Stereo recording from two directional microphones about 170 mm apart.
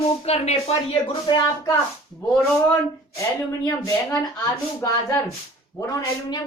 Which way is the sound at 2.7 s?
15° left (ahead or behind).